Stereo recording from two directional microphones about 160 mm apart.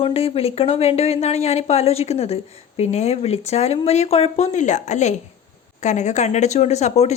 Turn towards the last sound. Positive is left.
turn(degrees=45)  # may be behind; listen again after turning